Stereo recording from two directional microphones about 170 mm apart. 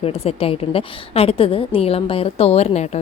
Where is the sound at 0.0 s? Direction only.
35° left (ahead or behind).